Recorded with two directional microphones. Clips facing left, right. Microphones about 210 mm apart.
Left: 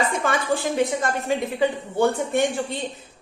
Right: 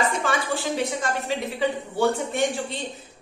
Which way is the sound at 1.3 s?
50° left (ahead or behind).